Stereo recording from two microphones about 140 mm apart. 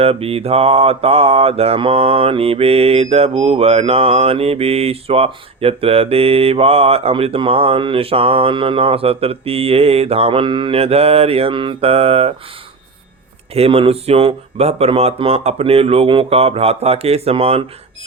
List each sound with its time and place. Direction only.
0.0 s mantra: 45° right (ahead or behind)
13.5 s mantra: 45° right (ahead or behind)